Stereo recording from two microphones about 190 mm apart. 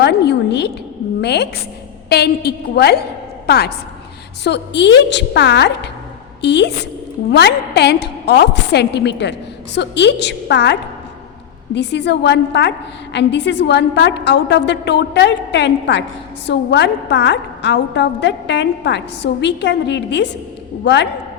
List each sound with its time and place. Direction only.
0.0 s a woman's voice: 60° left (ahead or behind)